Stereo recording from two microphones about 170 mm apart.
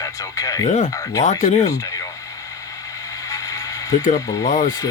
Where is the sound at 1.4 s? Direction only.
45° left (ahead or behind).